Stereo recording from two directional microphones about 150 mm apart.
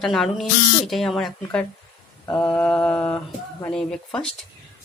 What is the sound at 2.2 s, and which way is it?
A woman's voice, 15° left (ahead or behind).